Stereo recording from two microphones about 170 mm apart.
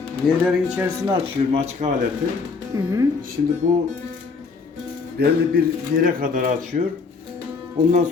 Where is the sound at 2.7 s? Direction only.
20° right (ahead or behind).